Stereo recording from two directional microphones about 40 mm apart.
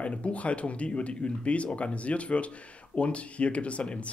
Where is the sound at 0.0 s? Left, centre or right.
Left.